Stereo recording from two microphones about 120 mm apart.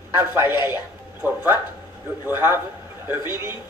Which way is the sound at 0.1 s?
15° right (ahead or behind).